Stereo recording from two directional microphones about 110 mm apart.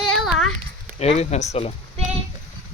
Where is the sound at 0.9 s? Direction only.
85° left.